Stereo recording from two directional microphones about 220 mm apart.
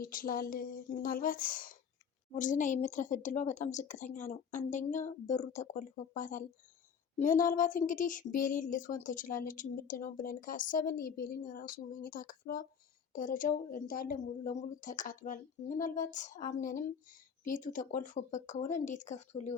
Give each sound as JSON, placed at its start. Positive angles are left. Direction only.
{"t": 0.0, "sound": "speech", "side_deg": 40}